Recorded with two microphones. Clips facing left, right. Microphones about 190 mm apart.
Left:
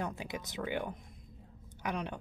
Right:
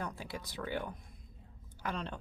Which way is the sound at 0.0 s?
20° left (ahead or behind).